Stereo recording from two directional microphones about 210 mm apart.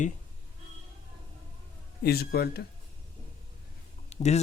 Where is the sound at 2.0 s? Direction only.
50° left (ahead or behind).